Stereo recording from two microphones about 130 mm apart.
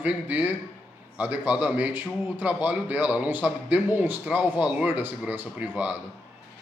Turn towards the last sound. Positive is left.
turn(degrees=-10)  # may be behind; listen again after turning